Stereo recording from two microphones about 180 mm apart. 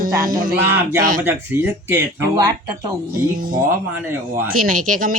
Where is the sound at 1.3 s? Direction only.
10° right (ahead or behind).